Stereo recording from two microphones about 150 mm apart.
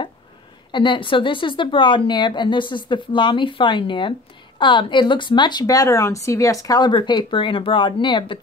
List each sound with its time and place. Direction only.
0.7 s speech: 30° left (ahead or behind)